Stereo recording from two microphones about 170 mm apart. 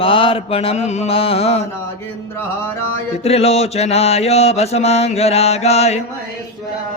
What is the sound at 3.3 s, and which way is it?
Music, 35° left (ahead or behind).